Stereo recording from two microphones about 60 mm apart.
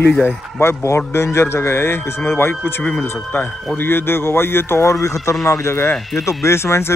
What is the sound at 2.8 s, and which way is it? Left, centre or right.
Speech, left.